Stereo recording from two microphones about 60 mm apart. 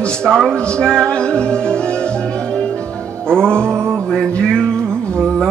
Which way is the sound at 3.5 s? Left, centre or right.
Right.